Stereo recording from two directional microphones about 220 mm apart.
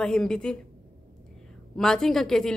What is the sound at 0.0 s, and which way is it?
Speech, 5° left (ahead or behind).